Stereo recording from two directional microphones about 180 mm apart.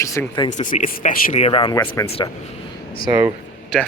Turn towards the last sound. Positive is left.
turn(degrees=5)  # may be behind; listen again after turning